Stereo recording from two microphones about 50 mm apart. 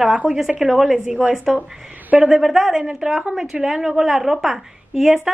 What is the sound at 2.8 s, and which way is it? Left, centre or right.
A woman's voice, centre.